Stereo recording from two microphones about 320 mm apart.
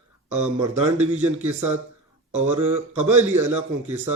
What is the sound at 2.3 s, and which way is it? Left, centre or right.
Speech, right.